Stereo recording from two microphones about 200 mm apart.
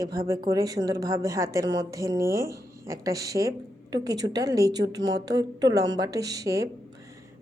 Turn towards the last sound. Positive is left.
turn(degrees=-15)  # may be behind; listen again after turning